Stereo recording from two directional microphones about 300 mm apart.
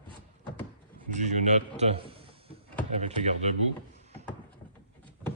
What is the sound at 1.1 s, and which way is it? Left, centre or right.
A man's voice, right.